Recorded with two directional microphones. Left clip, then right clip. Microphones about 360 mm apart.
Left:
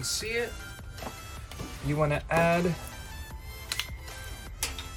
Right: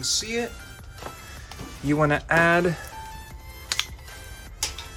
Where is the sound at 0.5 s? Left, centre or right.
Centre.